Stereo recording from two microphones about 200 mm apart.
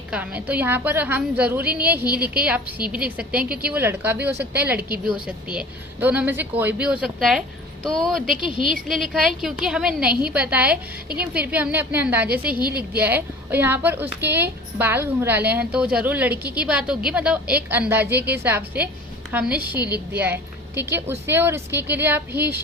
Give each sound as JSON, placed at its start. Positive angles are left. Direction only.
{"t": 0.1, "sound": "a woman's voice", "side_deg": -5}